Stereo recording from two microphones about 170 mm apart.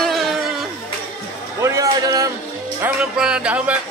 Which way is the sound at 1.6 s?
20° right (ahead or behind).